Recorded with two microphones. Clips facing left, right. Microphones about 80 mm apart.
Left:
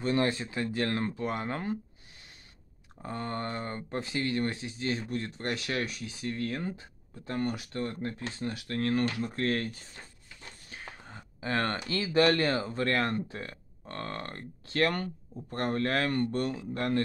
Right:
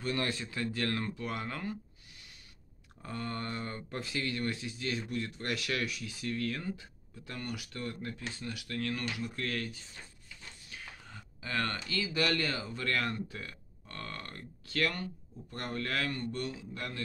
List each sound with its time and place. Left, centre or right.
0.0 s speech: left
3.0 s speech: left
10.7 s a sound: left
11.9 s speech: left